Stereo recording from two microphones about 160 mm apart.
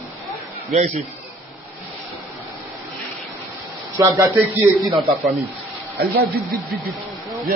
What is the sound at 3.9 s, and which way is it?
Speech, 20° right (ahead or behind).